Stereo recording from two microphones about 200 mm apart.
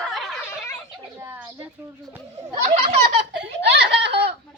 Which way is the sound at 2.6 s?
30° right (ahead or behind).